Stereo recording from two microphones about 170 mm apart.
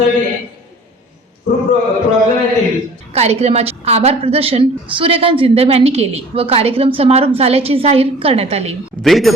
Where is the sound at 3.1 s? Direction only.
40° right (ahead or behind).